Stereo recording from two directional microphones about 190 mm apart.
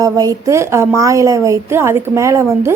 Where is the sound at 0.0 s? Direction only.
20° right (ahead or behind).